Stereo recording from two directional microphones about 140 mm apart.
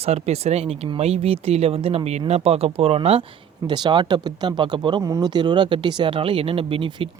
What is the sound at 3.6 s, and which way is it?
Speech, 30° right (ahead or behind).